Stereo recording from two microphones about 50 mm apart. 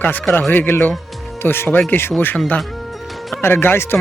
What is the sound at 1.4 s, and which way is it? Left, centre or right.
Speech, left.